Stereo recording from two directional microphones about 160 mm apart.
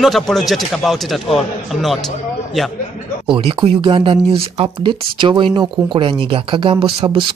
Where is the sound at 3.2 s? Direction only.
35° right (ahead or behind).